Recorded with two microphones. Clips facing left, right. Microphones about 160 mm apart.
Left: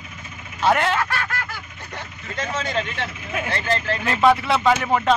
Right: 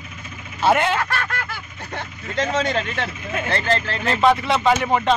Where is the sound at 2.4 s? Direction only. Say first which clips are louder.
Right 4 dB; 65° right (ahead or behind).